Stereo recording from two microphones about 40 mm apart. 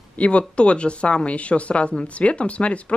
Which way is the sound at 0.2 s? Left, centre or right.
Left.